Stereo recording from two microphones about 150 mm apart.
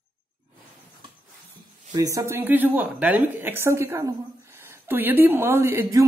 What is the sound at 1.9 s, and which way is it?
A woman's voice, 20° right (ahead or behind).